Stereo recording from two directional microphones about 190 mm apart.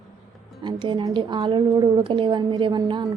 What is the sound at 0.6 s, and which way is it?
A woman's voice, 25° right (ahead or behind).